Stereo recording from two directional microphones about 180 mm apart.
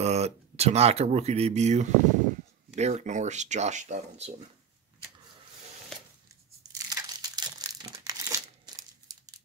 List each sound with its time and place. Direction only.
0.0 s speech: 35° right (ahead or behind)
5.9 s a sound: 5° left (ahead or behind)
6.7 s crumpling: 20° right (ahead or behind)